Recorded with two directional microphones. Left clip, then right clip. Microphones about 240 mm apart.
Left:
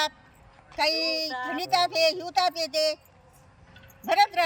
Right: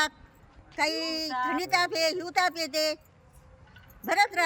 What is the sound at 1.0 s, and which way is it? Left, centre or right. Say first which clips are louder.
Speech: left 2 dB; right.